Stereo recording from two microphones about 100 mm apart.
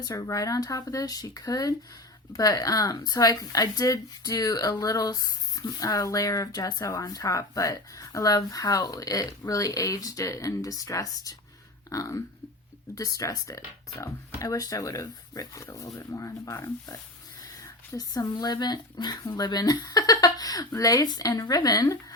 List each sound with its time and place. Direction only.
0.0 s speech: 40° left (ahead or behind)